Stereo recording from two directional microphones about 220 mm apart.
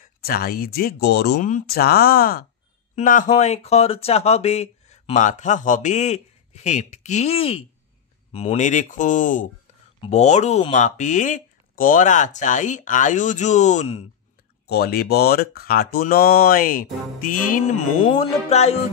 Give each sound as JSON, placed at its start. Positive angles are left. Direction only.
{"t": 0.0, "sound": "speech", "side_deg": 40}
{"t": 14.7, "sound": "speech", "side_deg": 45}